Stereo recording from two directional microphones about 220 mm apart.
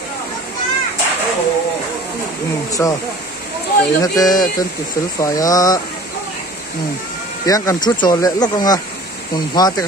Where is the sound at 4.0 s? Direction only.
15° left (ahead or behind).